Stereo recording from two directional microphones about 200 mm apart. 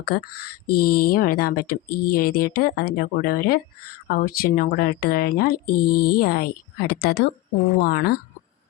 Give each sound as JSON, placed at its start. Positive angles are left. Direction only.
{"t": 0.0, "sound": "speech", "side_deg": 50}